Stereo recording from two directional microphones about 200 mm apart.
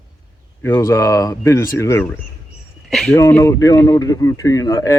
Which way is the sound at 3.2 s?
10° left (ahead or behind).